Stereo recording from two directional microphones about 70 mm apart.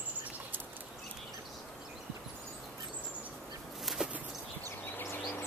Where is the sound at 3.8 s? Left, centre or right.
Centre.